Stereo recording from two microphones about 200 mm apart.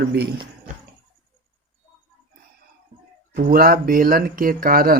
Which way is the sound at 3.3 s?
50° right (ahead or behind).